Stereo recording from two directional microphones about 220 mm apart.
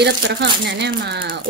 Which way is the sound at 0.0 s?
50° right (ahead or behind).